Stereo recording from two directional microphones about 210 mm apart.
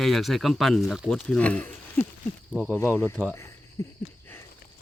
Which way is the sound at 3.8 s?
15° left (ahead or behind).